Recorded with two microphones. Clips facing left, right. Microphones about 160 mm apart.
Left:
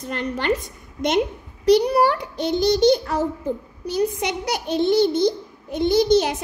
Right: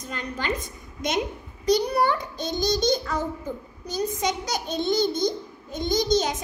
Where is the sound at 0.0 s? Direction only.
65° left (ahead or behind).